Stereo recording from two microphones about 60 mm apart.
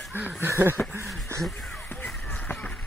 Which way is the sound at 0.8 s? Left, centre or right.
Left.